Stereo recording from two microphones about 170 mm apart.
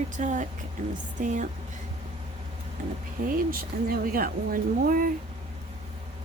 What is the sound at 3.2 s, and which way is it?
A woman's voice, 50° right (ahead or behind).